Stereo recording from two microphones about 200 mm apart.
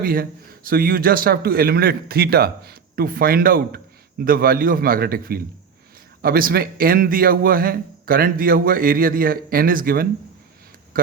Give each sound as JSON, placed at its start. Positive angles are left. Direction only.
{"t": 0.0, "sound": "a man's voice", "side_deg": -50}